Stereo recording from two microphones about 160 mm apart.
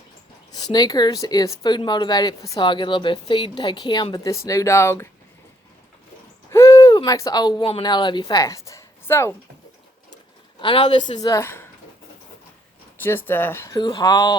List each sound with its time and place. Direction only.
0.5 s speech: 25° left (ahead or behind)
6.5 s hoot: 20° left (ahead or behind)
7.8 s a woman's voice: 30° left (ahead or behind)
10.6 s a woman's voice: 30° left (ahead or behind)
11.2 s speech: 20° left (ahead or behind)
13.0 s speech: 15° left (ahead or behind)